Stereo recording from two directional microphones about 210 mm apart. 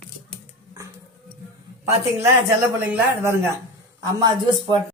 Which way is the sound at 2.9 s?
10° right (ahead or behind).